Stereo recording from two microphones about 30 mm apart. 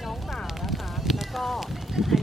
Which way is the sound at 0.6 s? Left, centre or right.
Centre.